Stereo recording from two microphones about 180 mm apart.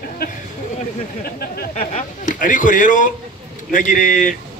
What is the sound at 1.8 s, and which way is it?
A man's voice, 45° left (ahead or behind).